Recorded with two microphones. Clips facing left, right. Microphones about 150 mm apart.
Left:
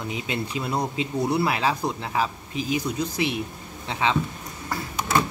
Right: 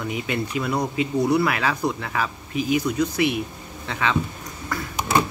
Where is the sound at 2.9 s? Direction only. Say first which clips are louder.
Right 5 dB; 60° right (ahead or behind).